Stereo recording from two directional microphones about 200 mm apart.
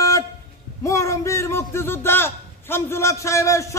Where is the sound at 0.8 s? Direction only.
15° left (ahead or behind).